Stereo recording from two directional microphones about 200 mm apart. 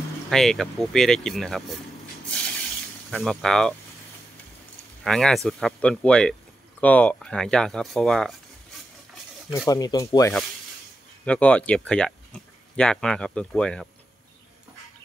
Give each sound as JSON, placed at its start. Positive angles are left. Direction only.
{"t": 0.3, "sound": "speech", "side_deg": 0}
{"t": 3.1, "sound": "speech", "side_deg": 0}
{"t": 5.0, "sound": "speech", "side_deg": 0}
{"t": 9.7, "sound": "speech", "side_deg": 20}
{"t": 11.2, "sound": "speech", "side_deg": 5}